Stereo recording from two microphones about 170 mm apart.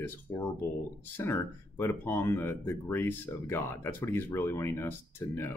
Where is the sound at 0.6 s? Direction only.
15° left (ahead or behind).